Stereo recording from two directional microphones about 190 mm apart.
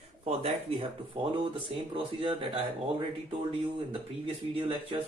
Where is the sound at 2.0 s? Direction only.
25° right (ahead or behind).